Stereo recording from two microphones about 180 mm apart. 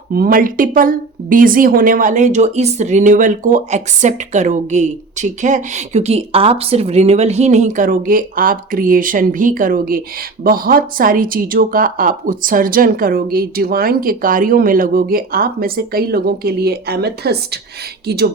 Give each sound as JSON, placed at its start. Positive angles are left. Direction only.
{"t": 0.1, "sound": "a woman's voice", "side_deg": -50}